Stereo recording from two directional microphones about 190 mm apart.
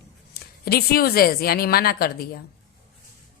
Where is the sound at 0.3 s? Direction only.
55° left (ahead or behind).